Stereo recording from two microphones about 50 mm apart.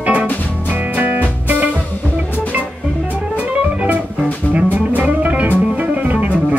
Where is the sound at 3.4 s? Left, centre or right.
Right.